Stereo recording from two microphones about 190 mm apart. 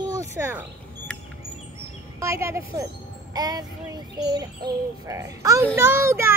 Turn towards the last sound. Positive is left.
turn(degrees=-15)  # may be behind; listen again after turning